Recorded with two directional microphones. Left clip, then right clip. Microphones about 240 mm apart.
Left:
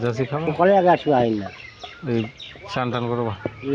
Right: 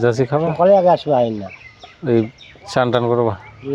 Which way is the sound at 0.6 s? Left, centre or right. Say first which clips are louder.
Right 3 dB; right.